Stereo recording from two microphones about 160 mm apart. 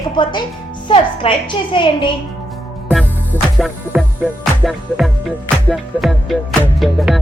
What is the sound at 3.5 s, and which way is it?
Music, 5° right (ahead or behind).